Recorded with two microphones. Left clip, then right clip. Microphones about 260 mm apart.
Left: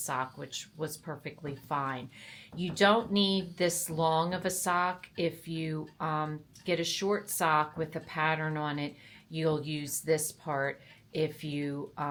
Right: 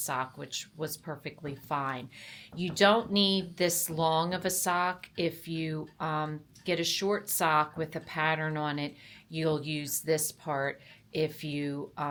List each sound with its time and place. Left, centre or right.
0.0 s speech: centre
10.5 s speech: right
11.1 s speech: centre